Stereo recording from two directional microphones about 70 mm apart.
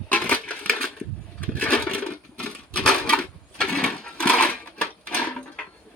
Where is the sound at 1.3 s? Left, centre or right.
Left.